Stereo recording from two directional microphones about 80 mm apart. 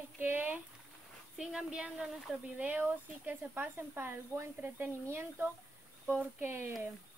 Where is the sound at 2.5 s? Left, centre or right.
Right.